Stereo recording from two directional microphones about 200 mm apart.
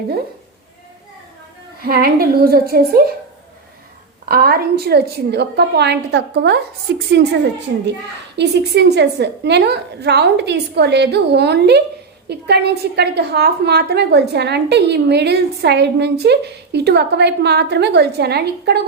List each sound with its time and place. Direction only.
1.8 s a woman's voice: 50° right (ahead or behind)
4.3 s a woman's voice: 50° right (ahead or behind)
8.4 s a woman's voice: 60° right (ahead or behind)